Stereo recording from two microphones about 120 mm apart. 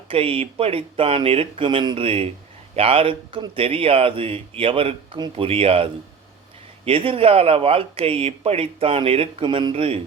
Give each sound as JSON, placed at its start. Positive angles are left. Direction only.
{"t": 0.1, "sound": "speech", "side_deg": -50}